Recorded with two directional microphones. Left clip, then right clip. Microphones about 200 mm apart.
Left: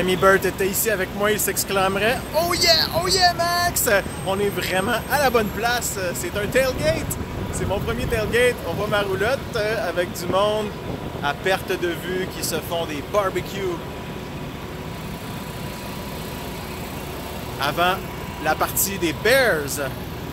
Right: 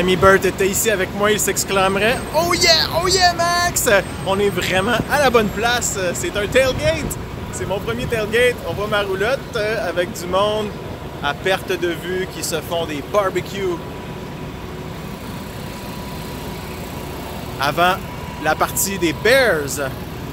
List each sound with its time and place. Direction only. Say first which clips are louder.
0.0 s speech: right 4 dB; 10° right (ahead or behind); by 13.7 s 25° right (ahead or behind)
17.6 s speech: right 4 dB; 55° right (ahead or behind)
18.4 s speech: right 3 dB; 40° right (ahead or behind); by 19.9 s 20° right (ahead or behind)